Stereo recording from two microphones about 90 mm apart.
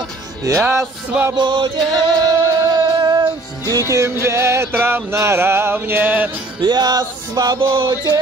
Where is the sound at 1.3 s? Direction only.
60° right (ahead or behind).